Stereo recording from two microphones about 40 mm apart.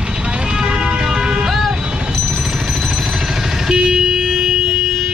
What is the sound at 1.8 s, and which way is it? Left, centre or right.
Vehicle, right.